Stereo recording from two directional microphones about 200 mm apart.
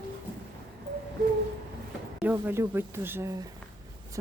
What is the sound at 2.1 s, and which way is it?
A woman's voice, 10° right (ahead or behind).